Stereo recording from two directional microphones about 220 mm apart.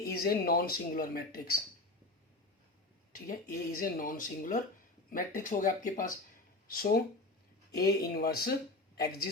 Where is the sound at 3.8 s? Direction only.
40° left (ahead or behind).